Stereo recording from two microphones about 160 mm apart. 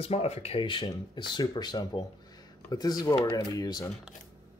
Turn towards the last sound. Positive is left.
turn(degrees=25)  # may be behind; listen again after turning